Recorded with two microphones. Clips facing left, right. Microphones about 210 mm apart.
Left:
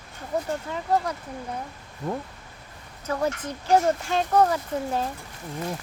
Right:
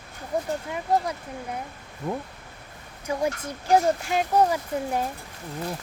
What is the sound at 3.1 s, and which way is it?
Speech, 15° right (ahead or behind).